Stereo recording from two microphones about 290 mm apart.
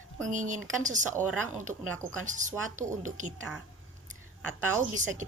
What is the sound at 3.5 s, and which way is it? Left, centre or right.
Speech, centre.